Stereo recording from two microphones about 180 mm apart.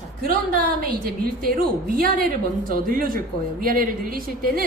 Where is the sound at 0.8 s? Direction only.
55° right (ahead or behind).